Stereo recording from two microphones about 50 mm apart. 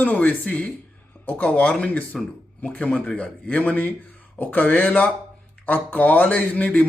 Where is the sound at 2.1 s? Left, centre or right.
Centre.